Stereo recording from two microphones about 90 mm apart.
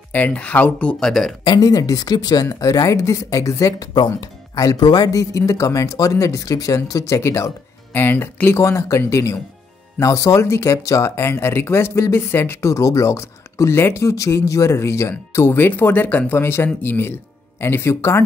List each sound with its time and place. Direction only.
0.1 s speech: 15° left (ahead or behind)
1.4 s speech: 45° left (ahead or behind)
2.4 s speech: 35° left (ahead or behind)
3.9 s speech: 50° left (ahead or behind); by 18.2 s 30° left (ahead or behind)